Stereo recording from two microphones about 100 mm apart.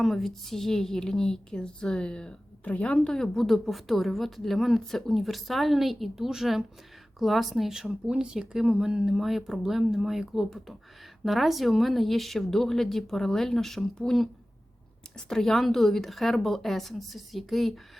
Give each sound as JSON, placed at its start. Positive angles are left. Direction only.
{"t": 0.0, "sound": "a woman's voice", "side_deg": 0}